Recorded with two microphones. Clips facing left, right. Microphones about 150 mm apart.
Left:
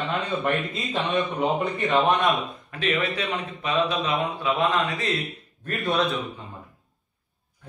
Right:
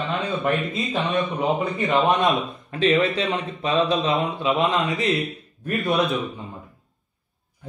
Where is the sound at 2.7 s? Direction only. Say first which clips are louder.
Right 7 dB; 30° right (ahead or behind).